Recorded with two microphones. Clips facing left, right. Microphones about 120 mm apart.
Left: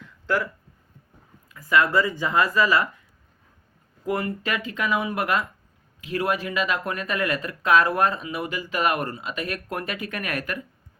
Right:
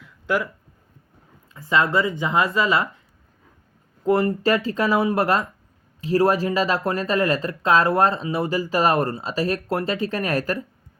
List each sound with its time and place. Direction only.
0.3 s speech: 15° right (ahead or behind)
1.5 s speech: 25° right (ahead or behind)
4.0 s speech: 30° right (ahead or behind)